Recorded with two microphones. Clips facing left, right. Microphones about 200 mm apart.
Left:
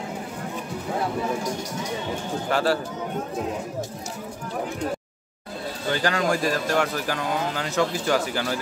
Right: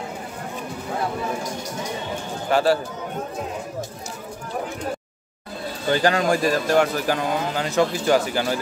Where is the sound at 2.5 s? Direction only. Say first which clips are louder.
Right 4 dB; 10° right (ahead or behind).